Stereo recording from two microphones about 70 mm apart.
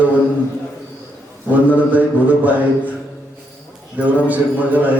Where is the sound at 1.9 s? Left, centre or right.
Right.